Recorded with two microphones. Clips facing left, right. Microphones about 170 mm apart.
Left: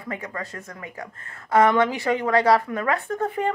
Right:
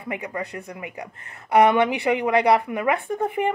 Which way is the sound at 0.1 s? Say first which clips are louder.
Right 3 dB; 15° right (ahead or behind).